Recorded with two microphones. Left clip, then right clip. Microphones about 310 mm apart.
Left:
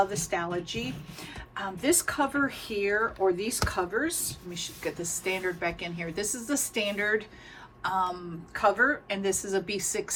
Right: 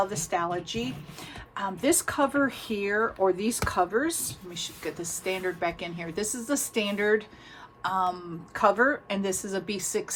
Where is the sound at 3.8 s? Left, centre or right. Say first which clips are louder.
Right 5 dB; centre.